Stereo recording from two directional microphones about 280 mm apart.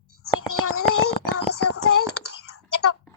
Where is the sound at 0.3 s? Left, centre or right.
Left.